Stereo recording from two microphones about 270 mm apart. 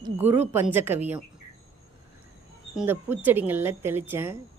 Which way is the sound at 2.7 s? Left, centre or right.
Centre.